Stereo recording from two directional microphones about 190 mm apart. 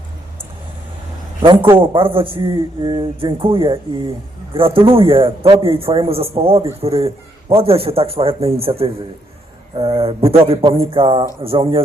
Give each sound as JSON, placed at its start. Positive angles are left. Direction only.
{"t": 1.4, "sound": "speech", "side_deg": -25}